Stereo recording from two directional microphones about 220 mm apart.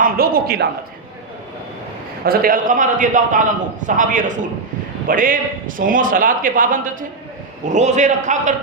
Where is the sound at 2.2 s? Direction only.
40° right (ahead or behind).